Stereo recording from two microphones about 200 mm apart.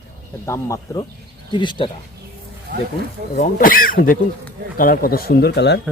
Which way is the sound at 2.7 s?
55° right (ahead or behind).